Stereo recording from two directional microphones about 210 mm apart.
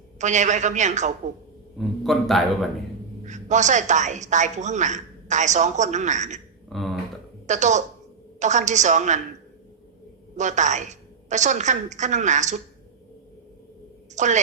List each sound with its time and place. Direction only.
0.2 s a woman's voice: 35° right (ahead or behind)
1.8 s a man's voice: centre (ahead or behind)
3.2 s a woman's voice: 35° right (ahead or behind)
6.7 s finger snapping: centre (ahead or behind)
7.4 s a woman's voice: 35° right (ahead or behind)
10.3 s a woman's voice: 35° right (ahead or behind)
14.2 s a woman's voice: 35° right (ahead or behind)